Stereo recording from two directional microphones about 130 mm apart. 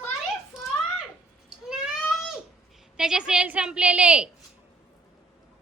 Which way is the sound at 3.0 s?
5° right (ahead or behind).